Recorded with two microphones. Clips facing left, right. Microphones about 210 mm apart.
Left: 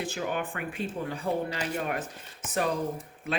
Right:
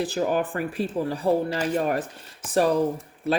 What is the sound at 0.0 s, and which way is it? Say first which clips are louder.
A man's voice: right 7 dB; 40° right (ahead or behind).